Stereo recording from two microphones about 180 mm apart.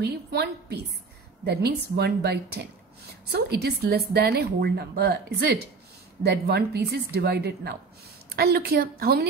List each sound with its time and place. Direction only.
0.0 s a woman's voice: 65° right (ahead or behind)